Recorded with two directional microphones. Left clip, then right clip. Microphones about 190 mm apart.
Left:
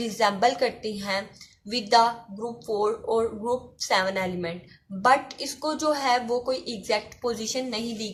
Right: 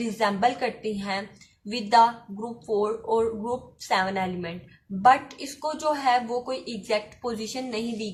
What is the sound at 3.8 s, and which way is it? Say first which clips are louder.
Speech: even; 45° left (ahead or behind).